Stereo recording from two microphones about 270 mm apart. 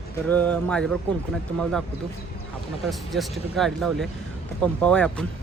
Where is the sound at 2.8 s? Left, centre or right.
Centre.